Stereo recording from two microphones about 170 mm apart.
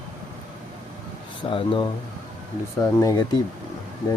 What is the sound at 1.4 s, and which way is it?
Speech, 30° left (ahead or behind).